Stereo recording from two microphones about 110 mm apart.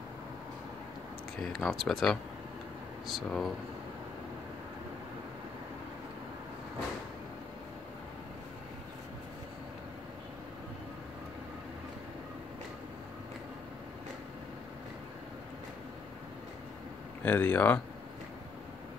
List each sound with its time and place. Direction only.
1.4 s speech: 5° left (ahead or behind)
17.2 s speech: 15° left (ahead or behind)